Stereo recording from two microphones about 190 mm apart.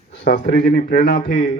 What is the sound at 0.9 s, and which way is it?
Speech, 60° left (ahead or behind).